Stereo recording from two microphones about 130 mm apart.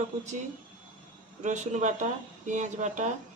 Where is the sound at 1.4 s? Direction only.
65° right (ahead or behind).